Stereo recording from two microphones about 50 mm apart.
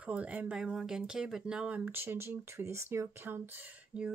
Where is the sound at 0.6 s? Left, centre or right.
Centre.